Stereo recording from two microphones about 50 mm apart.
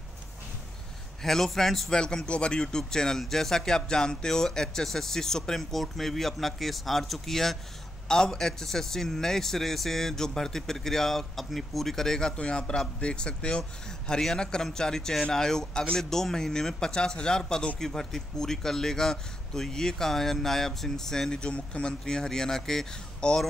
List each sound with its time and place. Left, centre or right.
1.2 s speech: centre